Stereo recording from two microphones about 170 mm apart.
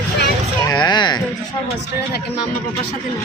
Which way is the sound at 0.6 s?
25° left (ahead or behind).